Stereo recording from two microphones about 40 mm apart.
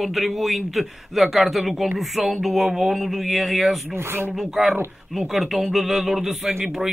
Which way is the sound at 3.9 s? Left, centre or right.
Right.